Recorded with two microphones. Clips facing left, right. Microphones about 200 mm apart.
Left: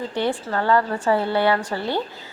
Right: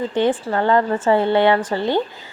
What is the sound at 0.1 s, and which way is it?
A woman's voice, 20° right (ahead or behind).